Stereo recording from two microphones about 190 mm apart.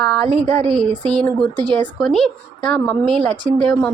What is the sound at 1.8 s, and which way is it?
Speech, 5° left (ahead or behind).